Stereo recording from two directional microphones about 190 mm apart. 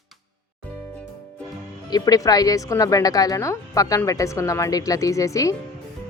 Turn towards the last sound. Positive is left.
turn(degrees=15)  # may be behind; listen again after turning